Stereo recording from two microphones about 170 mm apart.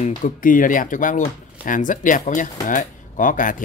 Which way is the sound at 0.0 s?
50° left (ahead or behind).